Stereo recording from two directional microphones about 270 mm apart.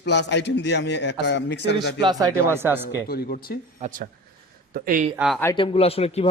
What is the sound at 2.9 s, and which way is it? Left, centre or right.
Speech, left.